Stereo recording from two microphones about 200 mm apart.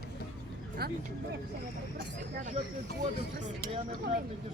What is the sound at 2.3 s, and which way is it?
Speech, 40° right (ahead or behind).